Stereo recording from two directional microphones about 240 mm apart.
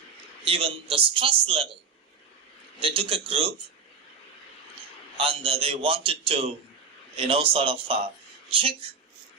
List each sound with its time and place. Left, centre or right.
0.4 s a man's voice: right
2.8 s a man's voice: right
5.1 s a man's voice: right